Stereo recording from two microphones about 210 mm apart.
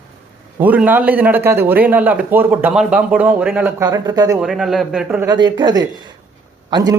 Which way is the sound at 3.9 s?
20° right (ahead or behind).